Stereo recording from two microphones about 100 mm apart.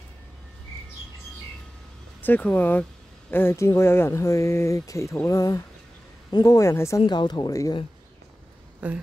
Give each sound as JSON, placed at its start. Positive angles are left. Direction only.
{"t": 2.2, "sound": "speech", "side_deg": 20}
{"t": 7.1, "sound": "speech", "side_deg": 45}
{"t": 8.8, "sound": "speech", "side_deg": -10}